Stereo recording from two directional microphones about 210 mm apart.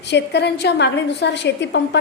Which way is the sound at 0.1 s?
55° left (ahead or behind).